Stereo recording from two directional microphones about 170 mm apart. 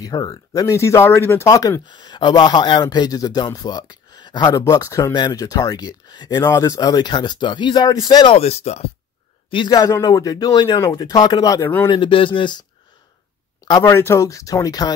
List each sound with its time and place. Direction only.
0.0 s speech: 20° left (ahead or behind)
8.4 s speech: 40° left (ahead or behind)
9.5 s speech: 25° left (ahead or behind)
11.9 s speech: 30° left (ahead or behind)
13.7 s speech: 20° left (ahead or behind)